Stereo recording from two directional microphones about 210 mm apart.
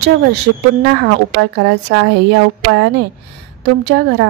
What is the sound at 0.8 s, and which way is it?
A woman's voice, 50° right (ahead or behind).